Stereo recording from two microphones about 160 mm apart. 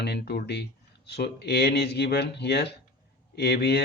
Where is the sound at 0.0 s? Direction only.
90° left.